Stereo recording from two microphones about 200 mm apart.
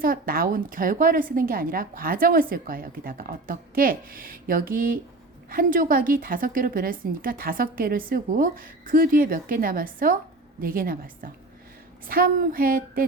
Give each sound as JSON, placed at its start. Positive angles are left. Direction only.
{"t": 0.0, "sound": "a woman's voice", "side_deg": -45}